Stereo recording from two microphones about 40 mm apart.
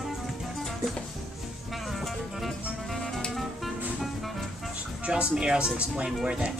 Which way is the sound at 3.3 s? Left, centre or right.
Centre.